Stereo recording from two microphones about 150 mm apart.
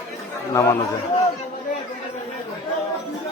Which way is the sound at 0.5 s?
20° left (ahead or behind).